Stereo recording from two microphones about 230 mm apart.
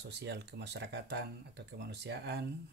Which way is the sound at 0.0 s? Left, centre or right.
Right.